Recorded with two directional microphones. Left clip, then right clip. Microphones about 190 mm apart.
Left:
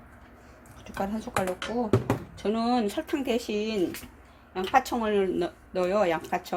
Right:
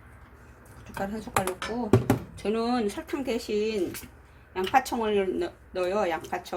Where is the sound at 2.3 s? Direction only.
20° left (ahead or behind); by 3.8 s 35° left (ahead or behind).